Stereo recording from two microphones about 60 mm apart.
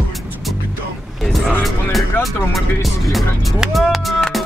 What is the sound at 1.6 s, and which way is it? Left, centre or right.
Music, centre.